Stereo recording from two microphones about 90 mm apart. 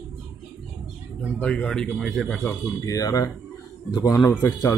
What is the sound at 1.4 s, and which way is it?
Speech, 15° left (ahead or behind).